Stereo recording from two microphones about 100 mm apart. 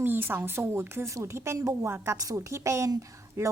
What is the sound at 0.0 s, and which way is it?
A woman's voice, 20° right (ahead or behind).